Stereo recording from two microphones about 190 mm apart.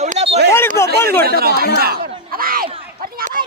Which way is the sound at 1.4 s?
55° right (ahead or behind).